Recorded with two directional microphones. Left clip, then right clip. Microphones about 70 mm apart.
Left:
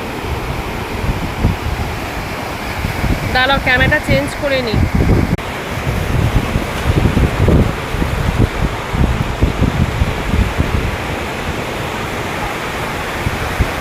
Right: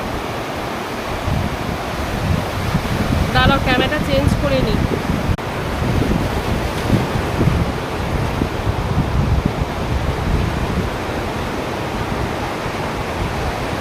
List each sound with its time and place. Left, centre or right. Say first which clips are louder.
3.3 s speech: left 3 dB; centre